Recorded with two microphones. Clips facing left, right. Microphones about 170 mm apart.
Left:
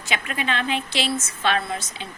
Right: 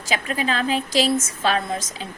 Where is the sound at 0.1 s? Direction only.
35° right (ahead or behind).